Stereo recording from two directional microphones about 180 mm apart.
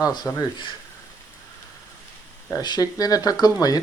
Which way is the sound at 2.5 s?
20° left (ahead or behind).